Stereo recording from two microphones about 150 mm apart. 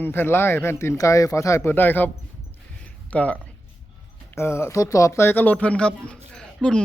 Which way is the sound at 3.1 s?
10° left (ahead or behind).